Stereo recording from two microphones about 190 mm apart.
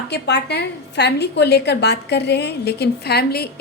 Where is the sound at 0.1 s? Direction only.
60° left (ahead or behind).